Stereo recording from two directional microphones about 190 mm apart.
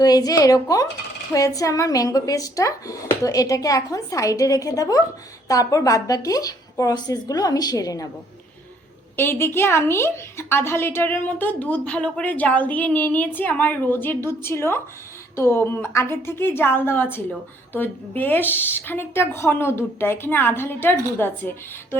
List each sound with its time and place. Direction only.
0.0 s a woman's voice: 20° left (ahead or behind)
9.1 s a woman's voice: 10° left (ahead or behind)